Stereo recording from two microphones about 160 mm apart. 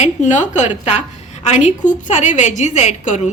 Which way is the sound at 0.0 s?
50° left (ahead or behind).